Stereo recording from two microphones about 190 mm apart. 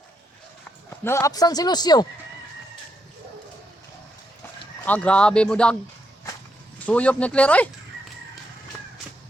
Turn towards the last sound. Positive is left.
turn(degrees=5)  # may be behind; listen again after turning